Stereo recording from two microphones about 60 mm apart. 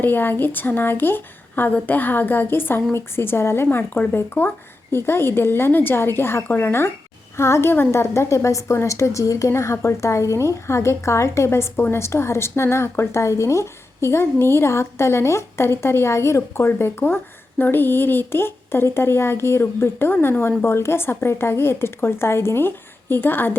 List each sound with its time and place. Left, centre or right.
0.0 s a woman's voice: left